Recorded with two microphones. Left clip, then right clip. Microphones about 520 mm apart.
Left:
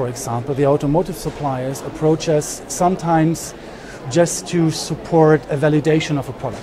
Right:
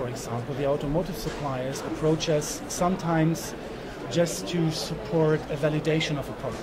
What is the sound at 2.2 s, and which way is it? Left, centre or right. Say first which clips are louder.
Speech: left 8 dB; left.